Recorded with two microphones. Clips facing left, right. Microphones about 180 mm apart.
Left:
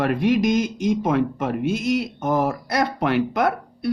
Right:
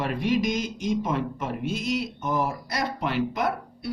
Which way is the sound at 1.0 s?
65° left (ahead or behind).